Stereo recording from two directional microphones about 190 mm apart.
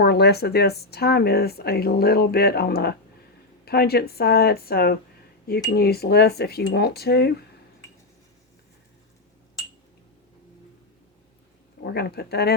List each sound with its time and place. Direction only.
0.0 s speech: 60° left (ahead or behind)
11.8 s speech: 55° left (ahead or behind)